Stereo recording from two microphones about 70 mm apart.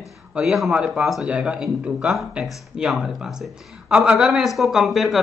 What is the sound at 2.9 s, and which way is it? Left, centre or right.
Speech, centre.